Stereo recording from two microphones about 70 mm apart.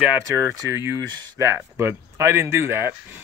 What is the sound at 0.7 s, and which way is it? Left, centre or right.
Speech, right.